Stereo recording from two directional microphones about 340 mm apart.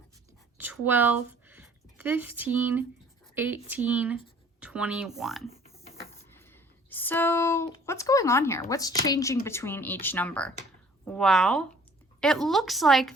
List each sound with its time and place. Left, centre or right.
0.6 s a woman's voice: centre